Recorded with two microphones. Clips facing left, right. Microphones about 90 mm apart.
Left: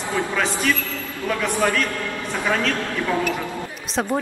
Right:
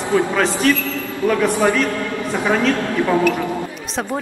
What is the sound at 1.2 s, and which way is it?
A man's voice, 20° right (ahead or behind).